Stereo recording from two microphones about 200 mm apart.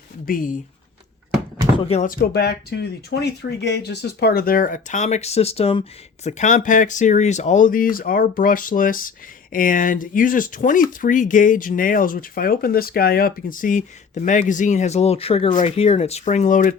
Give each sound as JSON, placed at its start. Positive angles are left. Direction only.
{"t": 0.3, "sound": "speech", "side_deg": 45}
{"t": 1.8, "sound": "speech", "side_deg": 30}
{"t": 2.0, "sound": "speech", "side_deg": 50}